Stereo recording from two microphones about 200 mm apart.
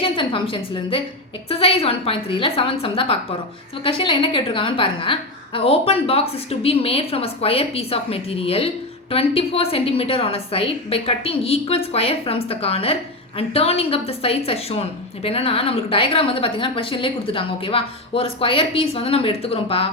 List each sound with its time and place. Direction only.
0.0 s a woman's voice: 25° left (ahead or behind)